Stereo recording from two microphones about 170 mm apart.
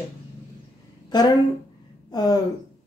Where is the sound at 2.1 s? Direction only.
25° left (ahead or behind).